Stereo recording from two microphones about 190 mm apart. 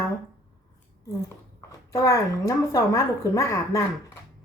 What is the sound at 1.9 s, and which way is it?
Speech, 15° left (ahead or behind).